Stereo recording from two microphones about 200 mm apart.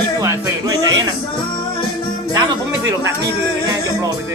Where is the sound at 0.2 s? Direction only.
15° right (ahead or behind).